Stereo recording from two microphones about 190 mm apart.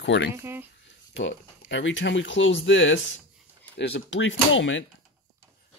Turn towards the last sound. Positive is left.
turn(degrees=90)